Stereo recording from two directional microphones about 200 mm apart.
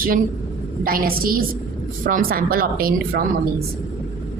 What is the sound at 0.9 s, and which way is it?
Speech, 45° right (ahead or behind).